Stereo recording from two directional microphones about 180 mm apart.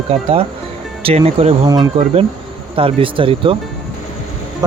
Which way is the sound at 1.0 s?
35° right (ahead or behind).